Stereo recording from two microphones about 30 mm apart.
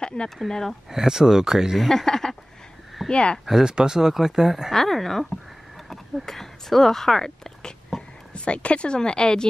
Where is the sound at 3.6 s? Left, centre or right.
Right.